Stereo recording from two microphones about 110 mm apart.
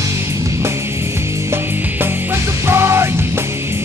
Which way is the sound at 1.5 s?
25° right (ahead or behind).